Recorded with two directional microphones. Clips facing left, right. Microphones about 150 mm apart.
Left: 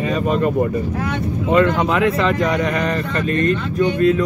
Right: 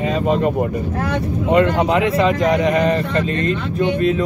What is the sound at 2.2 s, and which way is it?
Speech, 20° right (ahead or behind).